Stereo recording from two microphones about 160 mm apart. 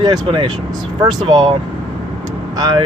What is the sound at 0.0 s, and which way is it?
Speech, 25° right (ahead or behind).